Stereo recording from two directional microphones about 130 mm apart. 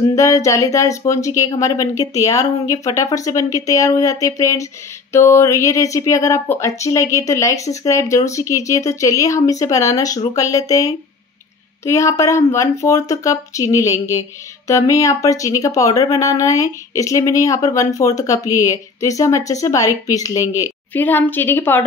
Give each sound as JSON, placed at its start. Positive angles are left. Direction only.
{"t": 0.1, "sound": "speech", "side_deg": 25}